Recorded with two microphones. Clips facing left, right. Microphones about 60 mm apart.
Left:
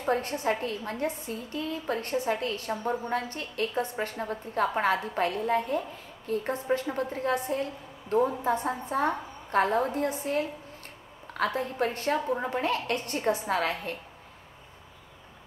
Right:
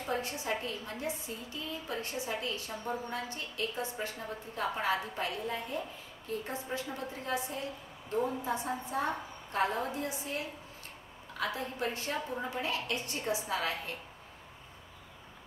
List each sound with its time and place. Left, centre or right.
0.0 s a woman's voice: left